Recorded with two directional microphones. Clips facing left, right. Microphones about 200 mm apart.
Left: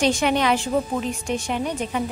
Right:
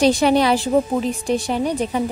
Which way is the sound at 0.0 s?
35° right (ahead or behind).